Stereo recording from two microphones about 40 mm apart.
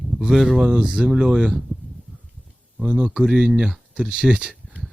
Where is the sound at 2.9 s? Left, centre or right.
Right.